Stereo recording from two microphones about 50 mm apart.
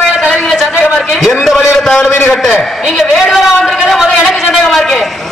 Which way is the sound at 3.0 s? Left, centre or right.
Centre.